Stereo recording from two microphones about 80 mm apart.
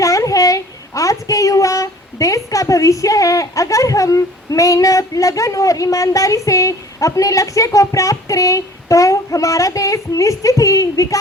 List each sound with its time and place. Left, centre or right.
0.0 s a woman's voice: left